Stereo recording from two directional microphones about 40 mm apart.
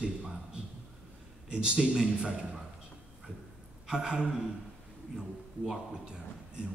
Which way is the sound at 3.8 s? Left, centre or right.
Right.